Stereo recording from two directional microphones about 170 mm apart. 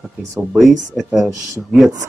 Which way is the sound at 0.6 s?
Centre (ahead or behind).